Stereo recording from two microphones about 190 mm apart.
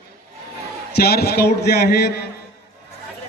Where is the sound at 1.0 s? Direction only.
55° left (ahead or behind).